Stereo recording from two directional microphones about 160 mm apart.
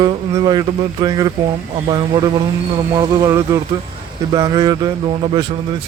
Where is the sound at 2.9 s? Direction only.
20° right (ahead or behind).